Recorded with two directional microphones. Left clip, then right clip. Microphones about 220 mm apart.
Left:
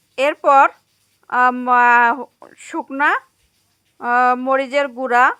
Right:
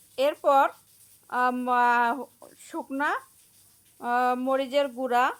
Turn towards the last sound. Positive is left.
turn(degrees=20)  # may be behind; listen again after turning